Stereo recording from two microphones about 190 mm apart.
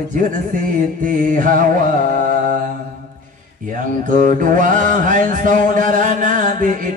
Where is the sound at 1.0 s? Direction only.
45° right (ahead or behind).